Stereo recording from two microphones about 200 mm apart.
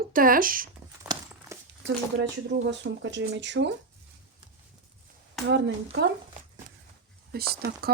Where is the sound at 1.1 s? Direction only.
20° right (ahead or behind).